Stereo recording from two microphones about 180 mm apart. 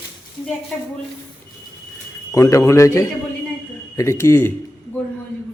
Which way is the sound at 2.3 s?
15° left (ahead or behind).